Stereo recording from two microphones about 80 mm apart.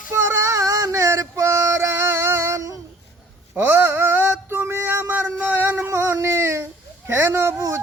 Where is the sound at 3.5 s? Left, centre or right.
Right.